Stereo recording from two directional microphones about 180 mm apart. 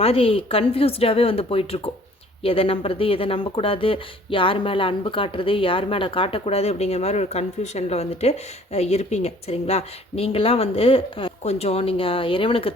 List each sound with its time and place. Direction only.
0.0 s speech: 30° left (ahead or behind)